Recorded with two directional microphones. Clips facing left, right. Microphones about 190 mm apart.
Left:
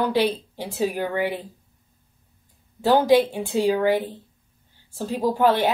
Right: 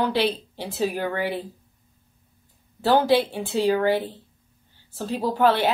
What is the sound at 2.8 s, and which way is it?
Speech, 15° left (ahead or behind).